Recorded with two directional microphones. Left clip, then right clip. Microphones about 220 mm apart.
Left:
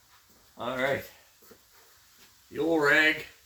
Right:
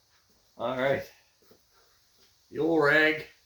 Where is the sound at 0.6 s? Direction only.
15° left (ahead or behind).